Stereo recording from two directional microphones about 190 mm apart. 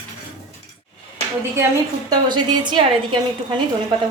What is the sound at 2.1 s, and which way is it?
A woman's voice, 25° right (ahead or behind).